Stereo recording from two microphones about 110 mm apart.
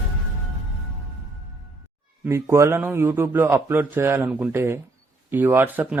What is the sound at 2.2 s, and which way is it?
Speech, 20° right (ahead or behind).